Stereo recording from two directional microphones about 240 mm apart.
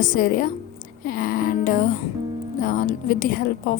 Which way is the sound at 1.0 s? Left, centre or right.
Left.